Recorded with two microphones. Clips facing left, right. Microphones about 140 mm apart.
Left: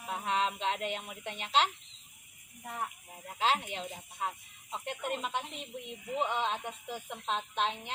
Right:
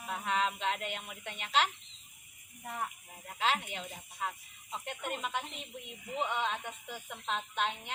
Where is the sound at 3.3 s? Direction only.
30° left (ahead or behind).